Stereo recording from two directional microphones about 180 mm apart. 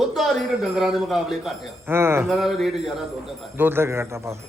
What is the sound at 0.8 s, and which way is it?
Speech, centre (ahead or behind).